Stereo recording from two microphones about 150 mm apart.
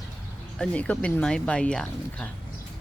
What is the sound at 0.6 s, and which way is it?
Speech, 10° left (ahead or behind).